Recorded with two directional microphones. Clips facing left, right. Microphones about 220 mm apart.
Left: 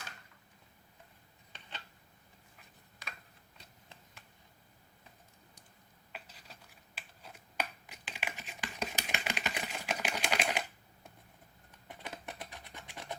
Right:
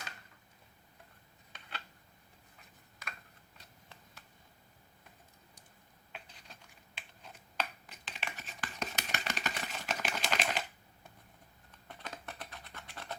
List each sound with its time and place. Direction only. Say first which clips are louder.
6.1 s finger snapping: left 1 dB; 5° left (ahead or behind)
11.9 s scratch: left 1 dB; 15° left (ahead or behind)